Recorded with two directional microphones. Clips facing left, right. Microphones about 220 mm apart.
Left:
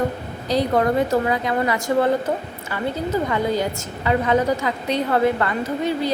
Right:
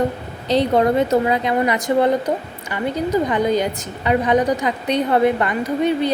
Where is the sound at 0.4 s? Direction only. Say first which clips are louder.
Right 3 dB; 25° right (ahead or behind).